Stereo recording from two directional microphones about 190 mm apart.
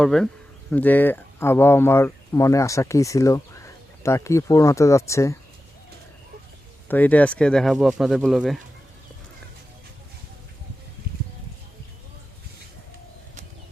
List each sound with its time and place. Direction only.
0.0 s speech: centre (ahead or behind)
6.8 s speech: 10° left (ahead or behind)